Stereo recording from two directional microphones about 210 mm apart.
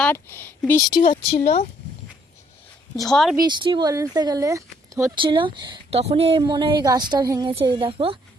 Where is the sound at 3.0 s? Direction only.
Centre (ahead or behind).